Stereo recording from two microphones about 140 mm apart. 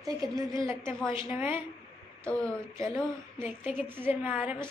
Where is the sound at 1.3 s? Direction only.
15° right (ahead or behind).